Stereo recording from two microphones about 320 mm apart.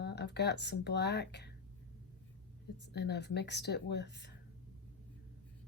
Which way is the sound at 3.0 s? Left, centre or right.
Left.